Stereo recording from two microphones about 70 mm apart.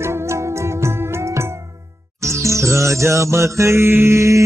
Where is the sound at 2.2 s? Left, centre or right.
Right.